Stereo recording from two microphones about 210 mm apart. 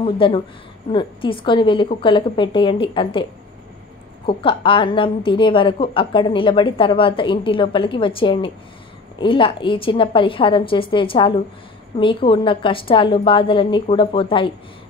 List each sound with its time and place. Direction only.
0.0 s a woman's voice: 25° left (ahead or behind)
4.3 s a woman's voice: 25° left (ahead or behind)